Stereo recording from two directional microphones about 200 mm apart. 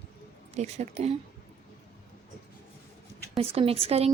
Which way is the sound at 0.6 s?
35° right (ahead or behind).